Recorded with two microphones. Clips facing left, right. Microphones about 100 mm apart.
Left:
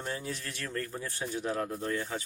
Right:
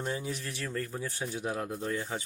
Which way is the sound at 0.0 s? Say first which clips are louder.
Right 2 dB; 15° right (ahead or behind).